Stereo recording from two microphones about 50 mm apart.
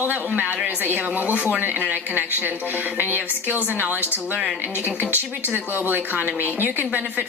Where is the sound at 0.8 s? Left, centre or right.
Right.